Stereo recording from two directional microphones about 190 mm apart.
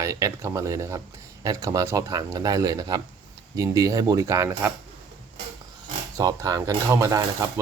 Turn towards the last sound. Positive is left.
turn(degrees=-15)  # may be behind; listen again after turning